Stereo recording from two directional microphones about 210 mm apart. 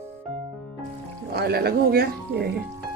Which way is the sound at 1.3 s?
50° right (ahead or behind).